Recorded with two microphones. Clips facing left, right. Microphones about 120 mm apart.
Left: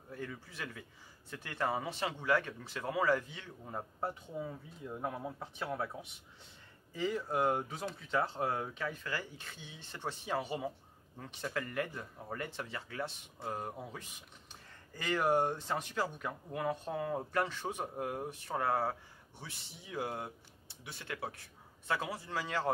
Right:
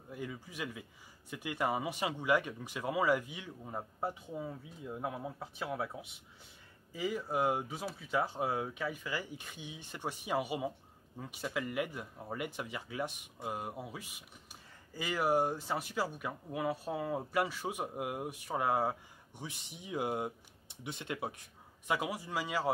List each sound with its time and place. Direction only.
0.1 s speech: 10° right (ahead or behind)